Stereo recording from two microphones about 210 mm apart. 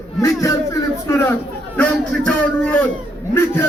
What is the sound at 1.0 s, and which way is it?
Chatter, 10° left (ahead or behind).